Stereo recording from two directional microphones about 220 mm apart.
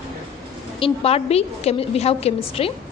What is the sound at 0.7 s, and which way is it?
A woman's voice, 25° left (ahead or behind).